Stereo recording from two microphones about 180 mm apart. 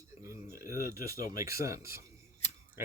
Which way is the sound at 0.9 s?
15° right (ahead or behind).